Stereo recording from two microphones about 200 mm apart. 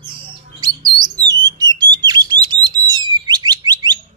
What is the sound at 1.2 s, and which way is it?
Bird, 20° right (ahead or behind).